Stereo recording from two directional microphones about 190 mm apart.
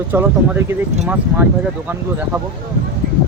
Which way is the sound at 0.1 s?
10° right (ahead or behind).